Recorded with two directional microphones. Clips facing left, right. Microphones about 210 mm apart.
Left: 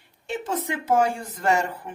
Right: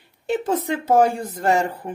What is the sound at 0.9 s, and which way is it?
Speech, 35° right (ahead or behind).